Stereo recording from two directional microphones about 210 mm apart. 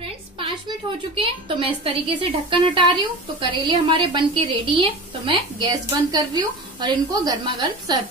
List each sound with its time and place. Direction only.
0.0 s a woman's voice: 25° right (ahead or behind)